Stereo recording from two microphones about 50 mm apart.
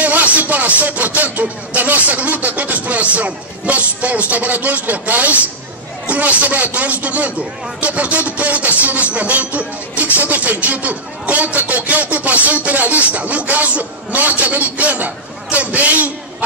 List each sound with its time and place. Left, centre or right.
0.0 s speech: right
6.0 s music: right